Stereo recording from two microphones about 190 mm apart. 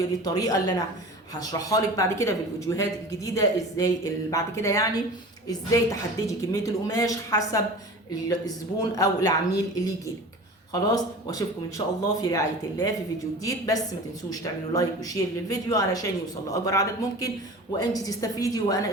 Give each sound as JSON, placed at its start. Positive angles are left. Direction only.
{"t": 0.3, "sound": "a woman's voice", "side_deg": 20}